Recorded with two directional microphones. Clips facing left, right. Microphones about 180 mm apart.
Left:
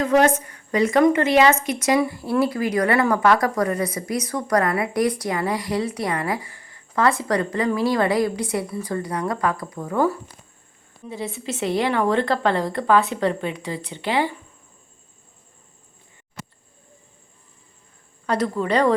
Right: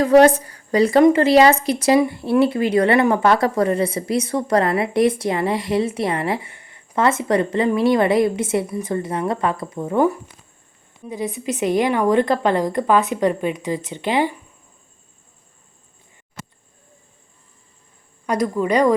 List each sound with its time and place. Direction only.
0.0 s a woman's voice: 35° right (ahead or behind); by 14.3 s 20° right (ahead or behind)
18.3 s a woman's voice: 10° right (ahead or behind)